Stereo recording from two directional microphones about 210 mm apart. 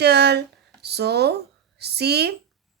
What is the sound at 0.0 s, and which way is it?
Speech, 50° right (ahead or behind).